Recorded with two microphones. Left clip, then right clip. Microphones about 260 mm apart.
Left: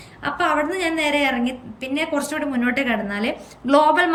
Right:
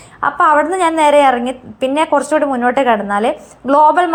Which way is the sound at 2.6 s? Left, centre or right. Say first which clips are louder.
Right 9 dB; centre.